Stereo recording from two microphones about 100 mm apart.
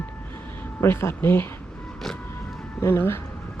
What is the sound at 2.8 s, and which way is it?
Speech, 25° left (ahead or behind).